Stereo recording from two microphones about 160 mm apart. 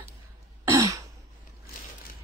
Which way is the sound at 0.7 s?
20° right (ahead or behind).